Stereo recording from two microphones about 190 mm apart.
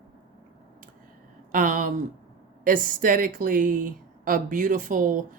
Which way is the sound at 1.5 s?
45° right (ahead or behind).